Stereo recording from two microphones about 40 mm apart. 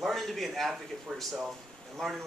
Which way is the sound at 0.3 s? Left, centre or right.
Centre.